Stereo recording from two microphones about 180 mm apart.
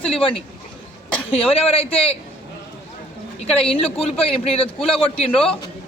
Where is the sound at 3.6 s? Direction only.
30° left (ahead or behind).